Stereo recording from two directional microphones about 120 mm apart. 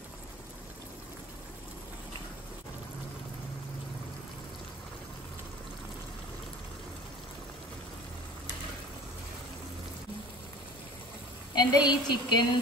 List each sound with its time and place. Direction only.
11.5 s a woman's voice: 35° left (ahead or behind)